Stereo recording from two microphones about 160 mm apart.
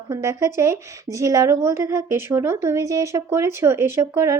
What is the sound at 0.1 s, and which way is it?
A woman's voice, 20° right (ahead or behind).